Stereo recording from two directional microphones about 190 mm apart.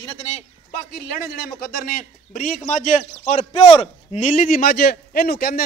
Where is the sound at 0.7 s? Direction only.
55° left (ahead or behind).